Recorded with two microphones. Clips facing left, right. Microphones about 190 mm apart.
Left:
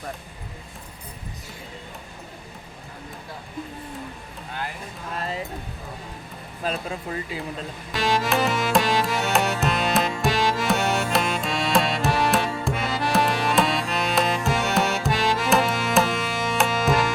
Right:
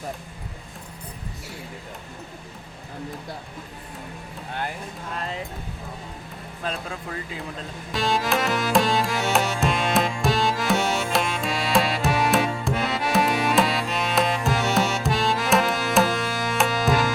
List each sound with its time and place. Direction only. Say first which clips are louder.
5.1 s speech: left 2 dB; 5° left (ahead or behind)
6.8 s speech: left 3 dB; 25° left (ahead or behind)
7.9 s music: left 1 dB; centre (ahead or behind)